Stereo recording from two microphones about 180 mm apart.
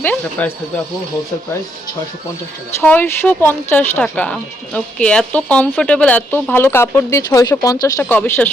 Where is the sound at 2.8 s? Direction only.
10° left (ahead or behind).